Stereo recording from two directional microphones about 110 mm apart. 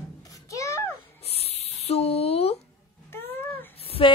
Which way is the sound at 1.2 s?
70° left (ahead or behind).